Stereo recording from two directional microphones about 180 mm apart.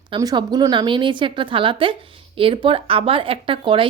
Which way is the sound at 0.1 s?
25° right (ahead or behind).